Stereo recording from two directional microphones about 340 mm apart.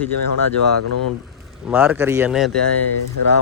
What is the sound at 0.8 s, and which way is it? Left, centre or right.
Speech, left.